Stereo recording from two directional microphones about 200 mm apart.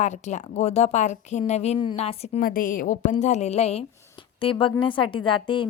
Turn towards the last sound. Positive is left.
turn(degrees=25)  # may be behind; listen again after turning